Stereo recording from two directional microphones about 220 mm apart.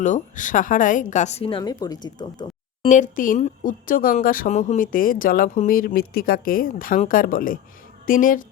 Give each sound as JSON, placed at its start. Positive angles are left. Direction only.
{"t": 0.0, "sound": "speech", "side_deg": 35}
{"t": 2.9, "sound": "speech", "side_deg": 35}